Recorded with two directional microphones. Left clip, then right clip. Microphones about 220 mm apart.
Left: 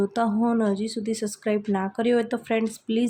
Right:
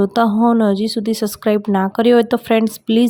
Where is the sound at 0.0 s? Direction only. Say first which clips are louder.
Right 9 dB; 30° right (ahead or behind).